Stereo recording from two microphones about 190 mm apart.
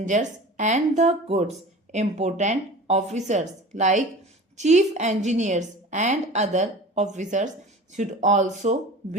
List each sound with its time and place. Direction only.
0.1 s a woman's voice: 40° right (ahead or behind)